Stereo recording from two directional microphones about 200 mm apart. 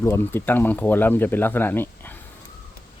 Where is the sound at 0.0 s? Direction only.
10° left (ahead or behind).